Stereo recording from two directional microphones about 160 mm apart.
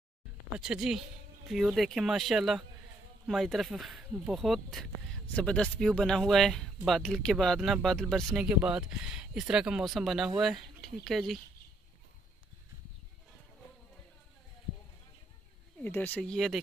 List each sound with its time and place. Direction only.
0.6 s speech: 5° right (ahead or behind)
15.8 s speech: 10° left (ahead or behind)